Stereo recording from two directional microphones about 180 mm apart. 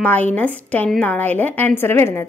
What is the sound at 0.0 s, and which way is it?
A woman's voice, 10° left (ahead or behind).